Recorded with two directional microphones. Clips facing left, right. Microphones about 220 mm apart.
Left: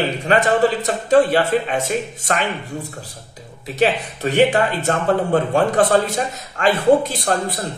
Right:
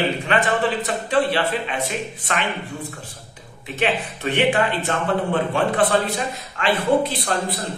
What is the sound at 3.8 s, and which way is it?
A man's voice, 40° left (ahead or behind).